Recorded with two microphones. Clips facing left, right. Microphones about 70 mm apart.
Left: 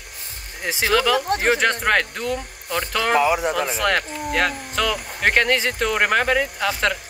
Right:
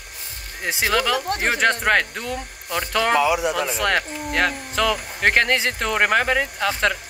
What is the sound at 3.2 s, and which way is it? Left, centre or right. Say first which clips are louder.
Speech: left 3 dB; left.